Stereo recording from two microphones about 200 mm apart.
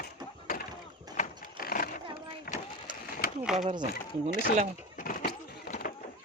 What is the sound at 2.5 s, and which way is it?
Vehicle, 45° left (ahead or behind).